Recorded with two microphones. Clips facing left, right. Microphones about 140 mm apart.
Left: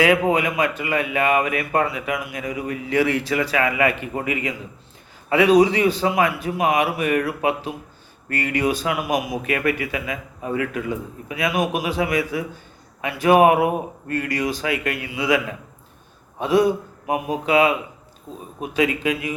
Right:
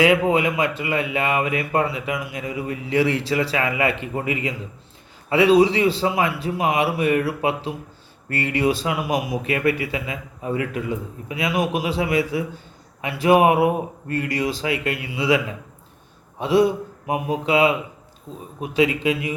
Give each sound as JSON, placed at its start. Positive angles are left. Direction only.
{"t": 0.3, "sound": "speech", "side_deg": -25}
{"t": 16.4, "sound": "speech", "side_deg": -25}